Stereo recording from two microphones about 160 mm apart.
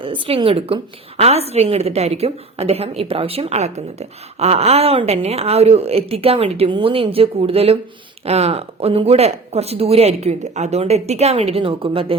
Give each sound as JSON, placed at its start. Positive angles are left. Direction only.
{"t": 0.0, "sound": "a woman's voice", "side_deg": -30}